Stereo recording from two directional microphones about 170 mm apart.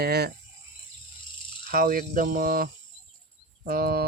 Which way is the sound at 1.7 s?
55° right (ahead or behind).